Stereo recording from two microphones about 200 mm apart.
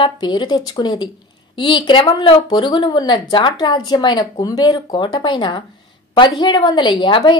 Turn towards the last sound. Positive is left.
turn(degrees=25)  # may be behind; listen again after turning